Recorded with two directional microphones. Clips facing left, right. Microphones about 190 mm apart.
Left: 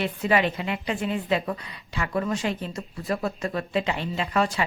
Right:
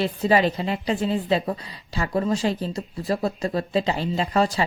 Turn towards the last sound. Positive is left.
turn(degrees=-35)  # may be behind; listen again after turning